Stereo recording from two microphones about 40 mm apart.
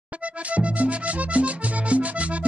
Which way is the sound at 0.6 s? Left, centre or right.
Right.